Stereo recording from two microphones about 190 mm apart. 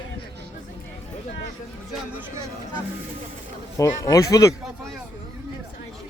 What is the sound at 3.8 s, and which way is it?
Speech, 15° left (ahead or behind).